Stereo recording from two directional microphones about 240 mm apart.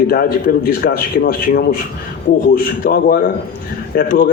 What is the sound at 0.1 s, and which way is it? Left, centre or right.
Speech, left.